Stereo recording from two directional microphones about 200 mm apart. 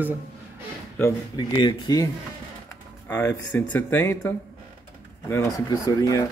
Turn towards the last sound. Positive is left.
turn(degrees=15)  # may be behind; listen again after turning